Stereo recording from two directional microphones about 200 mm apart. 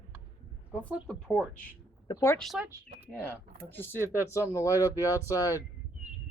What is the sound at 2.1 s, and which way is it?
Speech, 15° left (ahead or behind).